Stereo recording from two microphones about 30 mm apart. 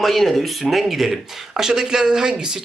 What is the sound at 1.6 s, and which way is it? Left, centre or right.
Speech, centre.